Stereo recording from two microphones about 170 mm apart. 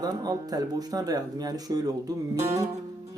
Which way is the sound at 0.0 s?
20° right (ahead or behind).